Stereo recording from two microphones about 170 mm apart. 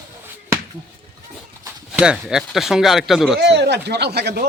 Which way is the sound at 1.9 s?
5° right (ahead or behind).